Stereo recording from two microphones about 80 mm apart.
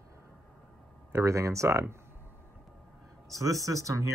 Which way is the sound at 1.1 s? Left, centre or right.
Right.